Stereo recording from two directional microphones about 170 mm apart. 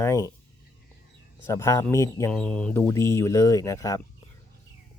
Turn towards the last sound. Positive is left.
turn(degrees=20)  # may be behind; listen again after turning